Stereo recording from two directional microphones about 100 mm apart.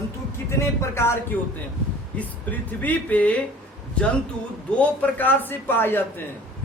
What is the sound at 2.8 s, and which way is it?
Speech, 15° left (ahead or behind).